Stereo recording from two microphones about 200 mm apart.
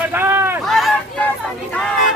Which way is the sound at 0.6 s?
Centre (ahead or behind).